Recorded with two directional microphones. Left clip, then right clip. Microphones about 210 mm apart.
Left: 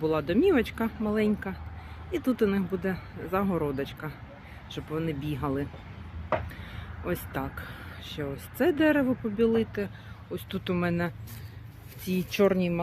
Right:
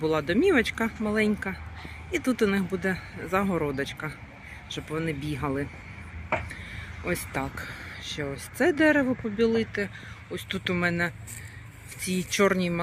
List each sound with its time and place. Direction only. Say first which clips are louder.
0.0 s speech: right 1 dB; centre (ahead or behind)
7.0 s speech: right 2 dB; 5° right (ahead or behind)